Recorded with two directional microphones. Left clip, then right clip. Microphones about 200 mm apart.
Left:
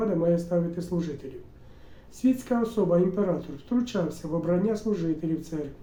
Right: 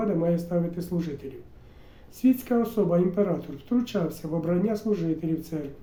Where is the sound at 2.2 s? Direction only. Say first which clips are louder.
Right 2 dB; 15° right (ahead or behind).